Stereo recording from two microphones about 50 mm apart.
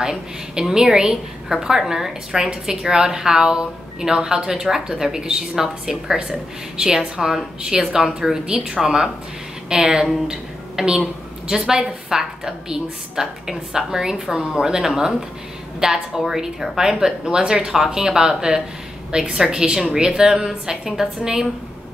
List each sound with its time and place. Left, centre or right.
0.0 s a woman's voice: centre
11.0 s a sound: centre
11.6 s a woman's voice: centre